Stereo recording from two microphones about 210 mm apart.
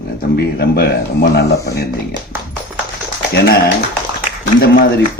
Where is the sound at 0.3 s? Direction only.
50° left (ahead or behind).